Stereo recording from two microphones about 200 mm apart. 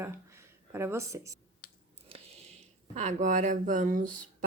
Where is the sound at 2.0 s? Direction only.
30° right (ahead or behind).